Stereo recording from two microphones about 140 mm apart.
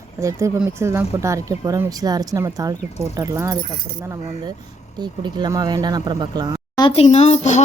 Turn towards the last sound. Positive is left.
turn(degrees=55)  # may be behind; listen again after turning